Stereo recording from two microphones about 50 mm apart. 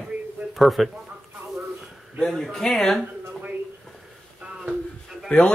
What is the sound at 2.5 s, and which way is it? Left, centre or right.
Speech, centre.